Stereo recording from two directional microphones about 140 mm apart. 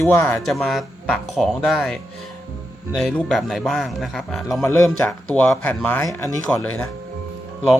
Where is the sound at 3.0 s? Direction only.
5° left (ahead or behind).